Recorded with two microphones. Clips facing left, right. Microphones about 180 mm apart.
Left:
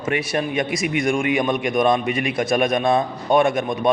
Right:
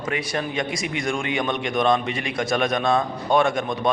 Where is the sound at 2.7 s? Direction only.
20° left (ahead or behind).